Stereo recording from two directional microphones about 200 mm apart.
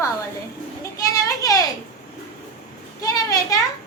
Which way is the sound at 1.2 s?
15° left (ahead or behind).